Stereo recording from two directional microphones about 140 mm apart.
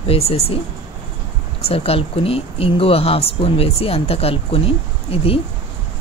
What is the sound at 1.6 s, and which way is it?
Speech, 45° left (ahead or behind).